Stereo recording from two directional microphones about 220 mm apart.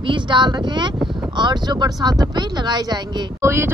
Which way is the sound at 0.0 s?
20° right (ahead or behind).